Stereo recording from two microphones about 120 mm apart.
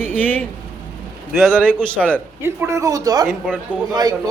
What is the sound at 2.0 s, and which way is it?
Speech, centre (ahead or behind).